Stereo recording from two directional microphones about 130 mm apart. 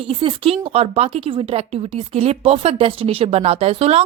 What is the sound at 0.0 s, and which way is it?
Speech, 45° right (ahead or behind).